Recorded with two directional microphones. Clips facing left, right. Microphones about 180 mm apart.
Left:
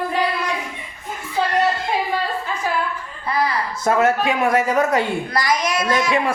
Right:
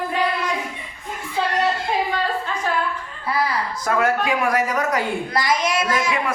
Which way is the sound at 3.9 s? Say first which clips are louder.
Left 3 dB; 25° left (ahead or behind).